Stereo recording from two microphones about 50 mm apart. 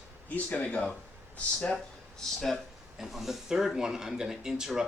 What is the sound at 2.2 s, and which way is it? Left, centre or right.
Speech, centre.